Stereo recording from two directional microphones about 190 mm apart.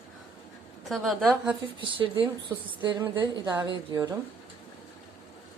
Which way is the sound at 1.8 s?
25° right (ahead or behind).